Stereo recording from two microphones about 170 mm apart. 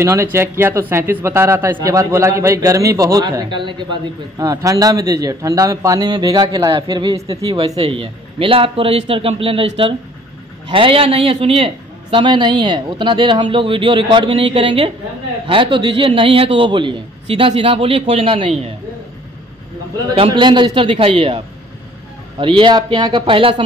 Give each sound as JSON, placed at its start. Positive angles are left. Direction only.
{"t": 0.0, "sound": "a man's voice", "side_deg": -15}
{"t": 7.5, "sound": "a man's voice", "side_deg": -35}
{"t": 10.7, "sound": "a man's voice", "side_deg": -30}
{"t": 20.2, "sound": "a man's voice", "side_deg": -25}
{"t": 22.4, "sound": "a man's voice", "side_deg": -30}